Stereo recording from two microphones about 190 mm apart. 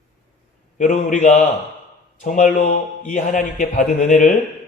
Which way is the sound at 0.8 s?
40° left (ahead or behind).